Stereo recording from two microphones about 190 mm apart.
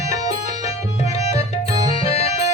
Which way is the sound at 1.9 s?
35° left (ahead or behind).